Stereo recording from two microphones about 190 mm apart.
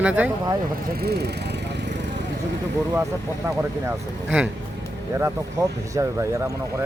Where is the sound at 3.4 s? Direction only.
10° right (ahead or behind).